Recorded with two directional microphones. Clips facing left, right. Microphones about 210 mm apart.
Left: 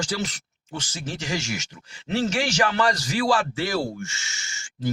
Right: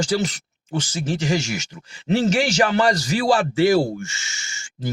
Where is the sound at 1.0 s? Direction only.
15° right (ahead or behind).